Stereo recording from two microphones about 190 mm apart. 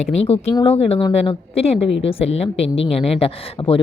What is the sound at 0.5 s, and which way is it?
A woman's voice, 30° left (ahead or behind).